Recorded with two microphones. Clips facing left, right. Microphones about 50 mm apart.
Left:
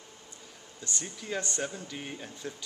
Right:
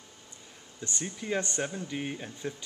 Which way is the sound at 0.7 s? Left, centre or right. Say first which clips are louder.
Right 2 dB; right.